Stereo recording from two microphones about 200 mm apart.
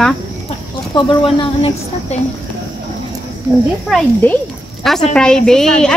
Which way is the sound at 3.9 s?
10° left (ahead or behind).